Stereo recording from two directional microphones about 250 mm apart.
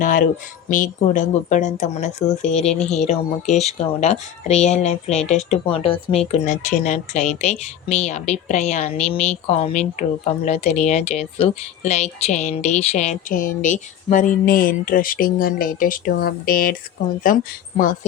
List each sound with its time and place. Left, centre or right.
0.0 s a woman's voice: left